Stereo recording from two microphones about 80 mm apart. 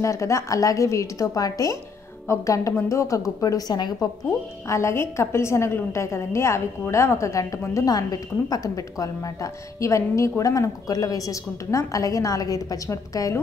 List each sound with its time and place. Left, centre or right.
0.0 s a woman's voice: left
4.6 s a woman's voice: left